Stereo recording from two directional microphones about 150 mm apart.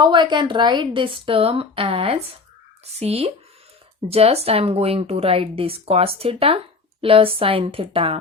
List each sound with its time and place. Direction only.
0.0 s a woman's voice: 30° right (ahead or behind)